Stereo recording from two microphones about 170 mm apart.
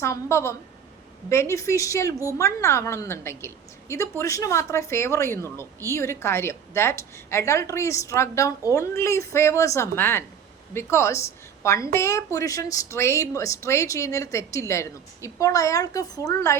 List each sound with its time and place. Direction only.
0.0 s a woman's voice: 15° left (ahead or behind)